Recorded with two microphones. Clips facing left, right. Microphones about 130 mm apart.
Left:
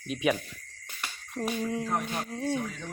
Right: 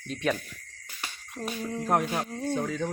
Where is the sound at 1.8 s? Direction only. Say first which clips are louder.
Right 5 dB; 90° right.